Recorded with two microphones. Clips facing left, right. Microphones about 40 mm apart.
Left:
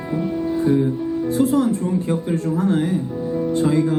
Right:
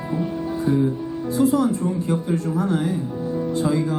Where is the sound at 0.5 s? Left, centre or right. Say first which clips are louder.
Left 3 dB; left.